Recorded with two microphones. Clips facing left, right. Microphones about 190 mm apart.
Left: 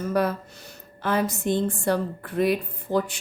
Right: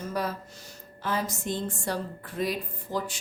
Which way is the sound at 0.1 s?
60° left (ahead or behind).